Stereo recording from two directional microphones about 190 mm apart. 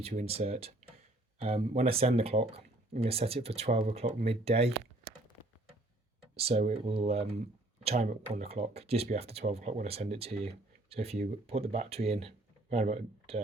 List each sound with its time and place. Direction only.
0.0 s speech: 35° right (ahead or behind)
6.3 s speech: 30° right (ahead or behind)